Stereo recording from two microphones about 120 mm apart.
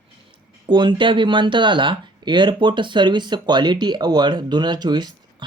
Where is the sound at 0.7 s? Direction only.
40° right (ahead or behind).